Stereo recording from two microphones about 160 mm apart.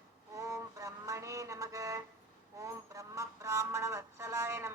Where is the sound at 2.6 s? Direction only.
20° right (ahead or behind).